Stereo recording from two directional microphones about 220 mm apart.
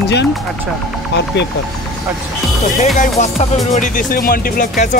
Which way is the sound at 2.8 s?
35° left (ahead or behind).